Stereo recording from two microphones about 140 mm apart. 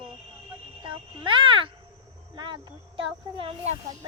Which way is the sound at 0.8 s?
35° right (ahead or behind).